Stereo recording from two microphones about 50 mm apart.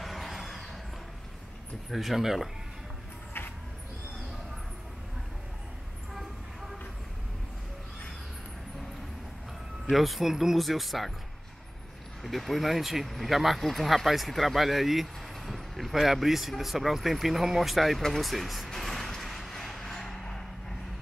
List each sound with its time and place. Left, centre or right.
0.0 s a sound: centre
1.9 s speech: centre
3.4 s a sound: left
9.8 s speech: centre
12.2 s speech: centre
18.0 s vehicle: centre